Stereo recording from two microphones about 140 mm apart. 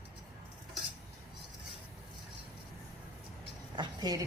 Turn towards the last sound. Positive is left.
turn(degrees=-30)  # may be behind; listen again after turning